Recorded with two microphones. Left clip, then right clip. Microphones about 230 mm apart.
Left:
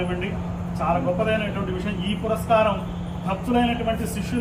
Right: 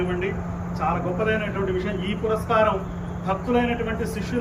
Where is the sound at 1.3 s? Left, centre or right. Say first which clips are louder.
Right 1 dB; centre.